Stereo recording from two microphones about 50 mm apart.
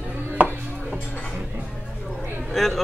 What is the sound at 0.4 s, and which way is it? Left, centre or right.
Chopping, right.